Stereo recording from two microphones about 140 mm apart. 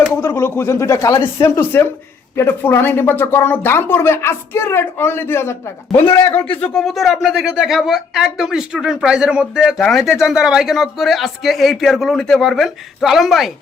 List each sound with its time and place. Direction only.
0.3 s speech: 15° left (ahead or behind)
6.4 s speech: 10° left (ahead or behind)